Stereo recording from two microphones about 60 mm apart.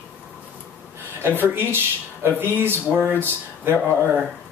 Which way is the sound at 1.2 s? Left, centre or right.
Right.